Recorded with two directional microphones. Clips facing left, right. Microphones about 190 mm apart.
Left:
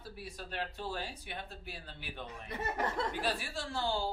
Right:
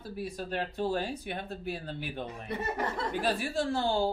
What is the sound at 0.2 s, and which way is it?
Speech, 45° right (ahead or behind).